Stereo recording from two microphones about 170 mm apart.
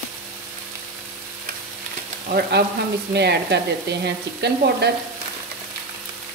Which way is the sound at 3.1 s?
80° right.